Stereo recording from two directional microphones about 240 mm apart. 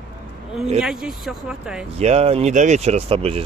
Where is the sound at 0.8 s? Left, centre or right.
Centre.